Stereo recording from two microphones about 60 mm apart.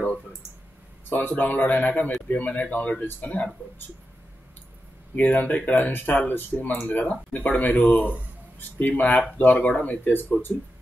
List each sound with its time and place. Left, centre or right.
1.0 s a man's voice: left
5.1 s a man's voice: left